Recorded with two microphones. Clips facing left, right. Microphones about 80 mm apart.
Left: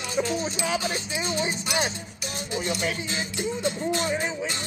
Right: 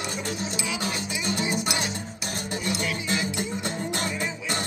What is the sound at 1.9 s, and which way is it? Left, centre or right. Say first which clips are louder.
Music: right 2 dB; right.